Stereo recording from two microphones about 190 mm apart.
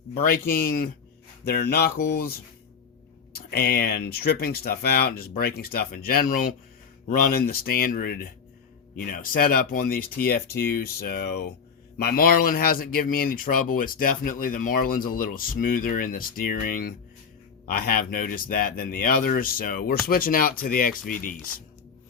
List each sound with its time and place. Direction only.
0.2 s speech: 50° left (ahead or behind)
3.3 s speech: 50° left (ahead or behind)